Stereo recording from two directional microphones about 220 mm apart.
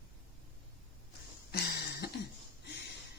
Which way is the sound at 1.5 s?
45° left (ahead or behind).